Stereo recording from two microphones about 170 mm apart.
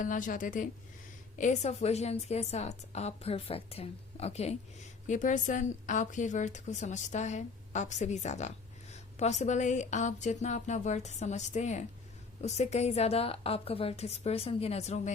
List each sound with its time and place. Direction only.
0.0 s a woman's voice: 50° left (ahead or behind)